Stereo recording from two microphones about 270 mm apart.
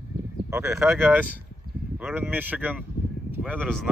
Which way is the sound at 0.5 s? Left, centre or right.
Centre.